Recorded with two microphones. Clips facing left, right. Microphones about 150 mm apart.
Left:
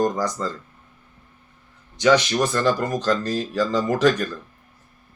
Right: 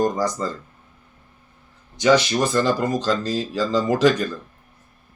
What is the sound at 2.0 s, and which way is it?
Speech, 10° right (ahead or behind).